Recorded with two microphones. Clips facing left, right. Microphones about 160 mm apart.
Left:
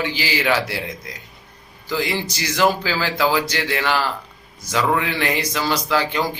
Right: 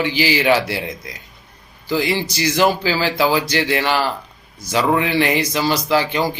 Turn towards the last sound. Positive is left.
turn(degrees=-15)  # may be behind; listen again after turning